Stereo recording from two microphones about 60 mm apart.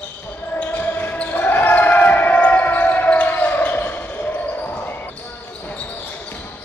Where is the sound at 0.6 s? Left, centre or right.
Left.